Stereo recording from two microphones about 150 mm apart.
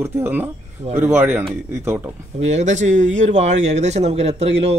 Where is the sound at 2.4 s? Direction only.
50° right (ahead or behind).